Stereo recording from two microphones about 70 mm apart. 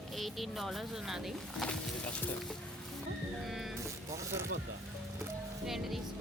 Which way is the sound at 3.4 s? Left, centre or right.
Centre.